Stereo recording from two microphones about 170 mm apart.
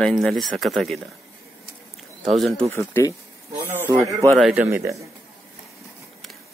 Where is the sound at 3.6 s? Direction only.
10° right (ahead or behind).